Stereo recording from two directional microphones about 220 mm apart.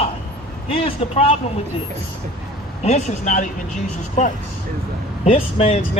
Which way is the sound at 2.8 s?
35° left (ahead or behind).